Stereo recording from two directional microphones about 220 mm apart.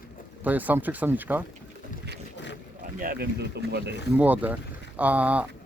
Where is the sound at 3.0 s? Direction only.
45° right (ahead or behind).